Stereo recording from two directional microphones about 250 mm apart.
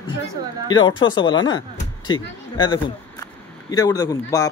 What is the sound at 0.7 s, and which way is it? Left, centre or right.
A man's voice, centre.